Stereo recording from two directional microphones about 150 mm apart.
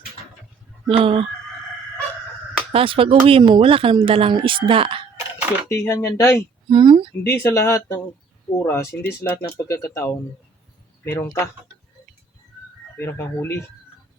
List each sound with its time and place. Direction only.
0.9 s speech: 35° right (ahead or behind)
2.7 s speech: 35° right (ahead or behind)
5.6 s speech: 15° left (ahead or behind)
6.7 s speech: 30° right (ahead or behind)
7.3 s speech: 20° left (ahead or behind)
13.0 s speech: 15° left (ahead or behind)